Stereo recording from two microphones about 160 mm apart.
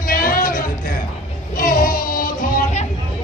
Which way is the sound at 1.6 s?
60° left (ahead or behind).